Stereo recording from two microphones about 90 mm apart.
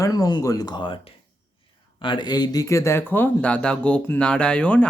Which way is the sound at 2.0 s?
60° left (ahead or behind).